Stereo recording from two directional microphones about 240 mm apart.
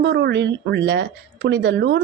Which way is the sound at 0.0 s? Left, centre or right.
Right.